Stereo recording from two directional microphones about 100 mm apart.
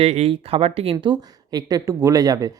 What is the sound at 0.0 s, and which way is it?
Speech, 85° right.